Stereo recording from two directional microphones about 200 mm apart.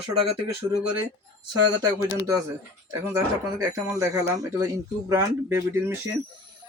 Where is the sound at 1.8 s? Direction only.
15° right (ahead or behind).